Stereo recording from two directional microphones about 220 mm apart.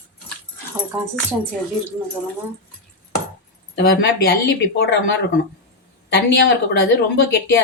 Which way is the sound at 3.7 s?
50° left (ahead or behind).